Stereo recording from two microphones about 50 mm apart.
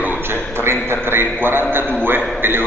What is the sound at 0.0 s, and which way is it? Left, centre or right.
A man's voice, right.